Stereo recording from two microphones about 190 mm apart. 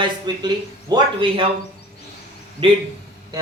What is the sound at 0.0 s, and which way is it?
A man's voice, 20° right (ahead or behind).